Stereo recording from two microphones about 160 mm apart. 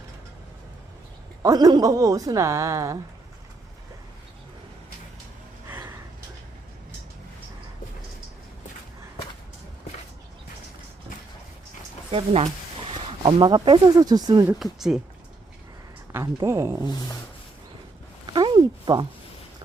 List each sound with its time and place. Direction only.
1.4 s a woman's voice: 20° right (ahead or behind)
12.1 s speech: 40° right (ahead or behind)
13.2 s a woman's voice: 30° right (ahead or behind)
14.6 s speech: 5° right (ahead or behind)
16.1 s speech: 10° right (ahead or behind)
18.3 s a sound: 30° right (ahead or behind)